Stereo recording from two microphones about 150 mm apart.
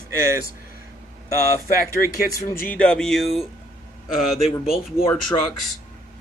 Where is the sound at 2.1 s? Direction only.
20° left (ahead or behind).